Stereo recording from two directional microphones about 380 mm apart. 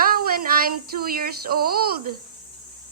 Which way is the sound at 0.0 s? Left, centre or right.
Right.